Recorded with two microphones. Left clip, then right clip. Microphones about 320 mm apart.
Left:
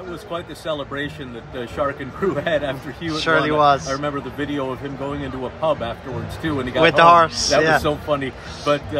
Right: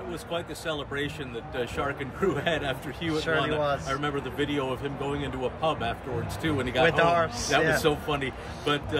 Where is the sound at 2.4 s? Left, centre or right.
Centre.